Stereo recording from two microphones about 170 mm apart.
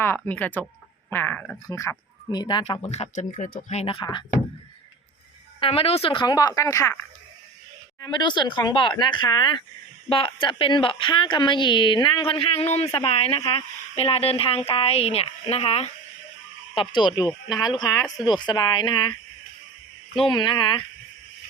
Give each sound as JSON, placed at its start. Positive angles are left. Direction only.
{"t": 0.0, "sound": "speech", "side_deg": 10}
{"t": 1.6, "sound": "a woman's voice", "side_deg": 20}
{"t": 2.9, "sound": "speech", "side_deg": 45}
{"t": 5.5, "sound": "a woman's voice", "side_deg": 35}
{"t": 8.0, "sound": "a woman's voice", "side_deg": 25}
{"t": 20.2, "sound": "a woman's voice", "side_deg": 30}